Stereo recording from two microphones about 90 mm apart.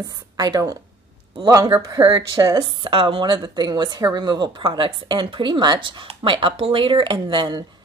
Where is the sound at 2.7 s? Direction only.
70° right (ahead or behind).